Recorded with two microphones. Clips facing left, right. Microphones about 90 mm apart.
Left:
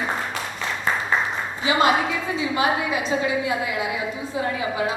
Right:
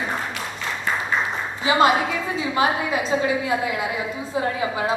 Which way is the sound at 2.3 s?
30° right (ahead or behind).